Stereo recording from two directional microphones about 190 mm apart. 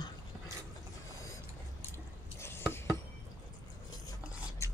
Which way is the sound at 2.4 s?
10° left (ahead or behind).